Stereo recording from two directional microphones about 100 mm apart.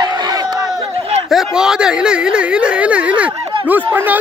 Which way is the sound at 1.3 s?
5° right (ahead or behind).